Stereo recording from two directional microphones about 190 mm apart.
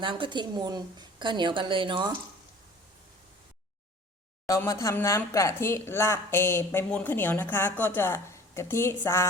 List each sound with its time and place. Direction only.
0.0 s a woman's voice: 25° right (ahead or behind)
4.4 s a woman's voice: 15° left (ahead or behind)